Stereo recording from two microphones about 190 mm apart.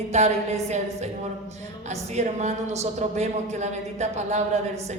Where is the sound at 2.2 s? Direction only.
35° right (ahead or behind).